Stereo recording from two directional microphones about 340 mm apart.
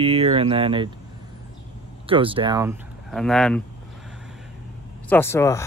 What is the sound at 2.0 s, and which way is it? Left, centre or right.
Speech, centre.